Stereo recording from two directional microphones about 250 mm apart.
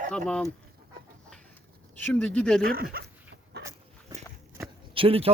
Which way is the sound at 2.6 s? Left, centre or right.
Right.